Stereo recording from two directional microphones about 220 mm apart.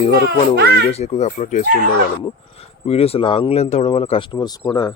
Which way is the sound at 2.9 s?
25° left (ahead or behind).